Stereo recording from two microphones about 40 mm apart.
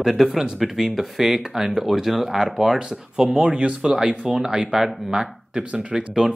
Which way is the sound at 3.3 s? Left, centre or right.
Right.